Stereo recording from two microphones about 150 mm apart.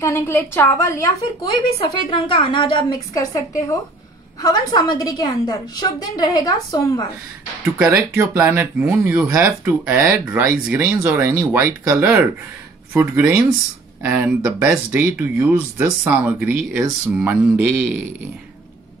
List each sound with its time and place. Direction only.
0.0 s a woman's voice: 15° left (ahead or behind)
2.0 s a woman's voice: 35° left (ahead or behind)
7.8 s speech: 5° right (ahead or behind)